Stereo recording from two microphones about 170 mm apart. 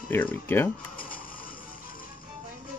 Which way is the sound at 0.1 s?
10° left (ahead or behind).